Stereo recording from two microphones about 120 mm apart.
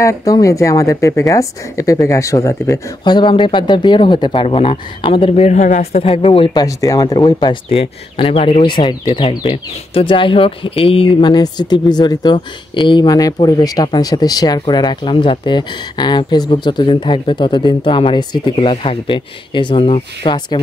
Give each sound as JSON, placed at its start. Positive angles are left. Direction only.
{"t": 0.0, "sound": "speech", "side_deg": 25}
{"t": 3.0, "sound": "speech", "side_deg": 40}
{"t": 6.6, "sound": "speech", "side_deg": 30}
{"t": 7.7, "sound": "speech", "side_deg": 50}
{"t": 8.6, "sound": "speech", "side_deg": 40}